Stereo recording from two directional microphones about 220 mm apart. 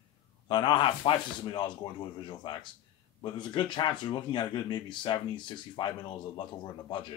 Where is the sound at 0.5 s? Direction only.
20° left (ahead or behind).